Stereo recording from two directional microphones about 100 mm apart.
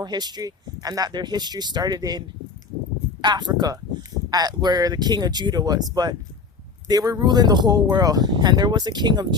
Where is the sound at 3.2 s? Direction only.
45° right (ahead or behind).